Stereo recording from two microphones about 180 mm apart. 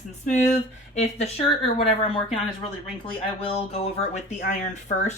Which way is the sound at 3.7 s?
35° left (ahead or behind).